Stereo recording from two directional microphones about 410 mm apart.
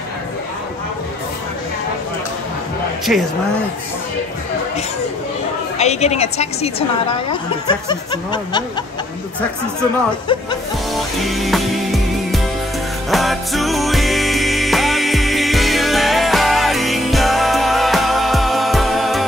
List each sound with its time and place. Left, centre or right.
3.1 s speech: centre
5.8 s speech: centre
11.0 s music: centre